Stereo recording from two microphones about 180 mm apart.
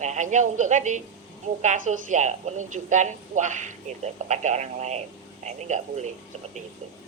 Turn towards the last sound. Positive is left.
turn(degrees=-40)  # may be behind; listen again after turning